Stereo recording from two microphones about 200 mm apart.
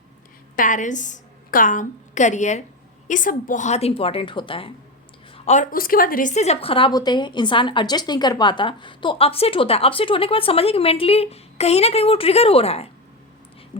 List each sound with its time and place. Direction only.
0.5 s a woman's voice: 40° left (ahead or behind); by 4.7 s 25° left (ahead or behind)
5.5 s a woman's voice: 40° left (ahead or behind)